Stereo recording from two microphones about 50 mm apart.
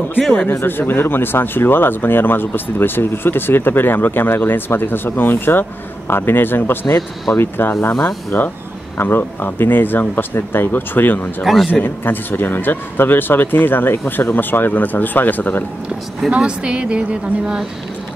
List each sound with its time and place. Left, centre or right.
0.5 s speech: left
11.4 s a man's voice: centre
11.8 s speech: left
16.3 s a woman's voice: centre